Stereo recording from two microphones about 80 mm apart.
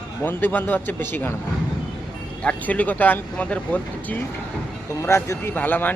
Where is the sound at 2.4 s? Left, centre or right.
Centre.